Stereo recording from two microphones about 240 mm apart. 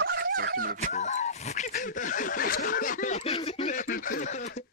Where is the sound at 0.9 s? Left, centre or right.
Left.